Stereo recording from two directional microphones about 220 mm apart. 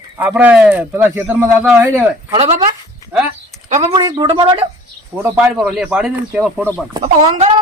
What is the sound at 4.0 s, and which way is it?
Speech, 20° right (ahead or behind).